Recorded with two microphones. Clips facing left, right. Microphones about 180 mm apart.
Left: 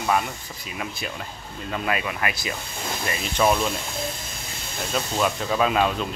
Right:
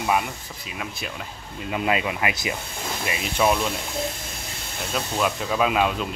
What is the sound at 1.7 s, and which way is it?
Speech, 20° right (ahead or behind).